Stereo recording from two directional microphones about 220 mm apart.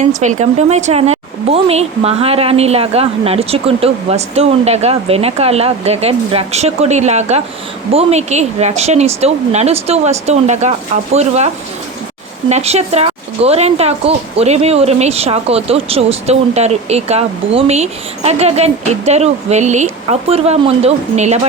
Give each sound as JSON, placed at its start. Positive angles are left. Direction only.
{"t": 0.0, "sound": "speech", "side_deg": -35}